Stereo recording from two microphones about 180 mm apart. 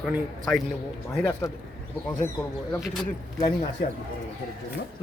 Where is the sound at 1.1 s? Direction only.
10° left (ahead or behind).